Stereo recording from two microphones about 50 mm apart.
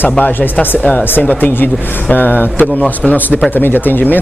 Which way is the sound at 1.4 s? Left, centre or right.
Left.